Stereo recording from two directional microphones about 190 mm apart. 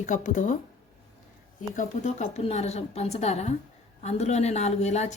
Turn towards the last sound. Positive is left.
turn(degrees=35)  # may be behind; listen again after turning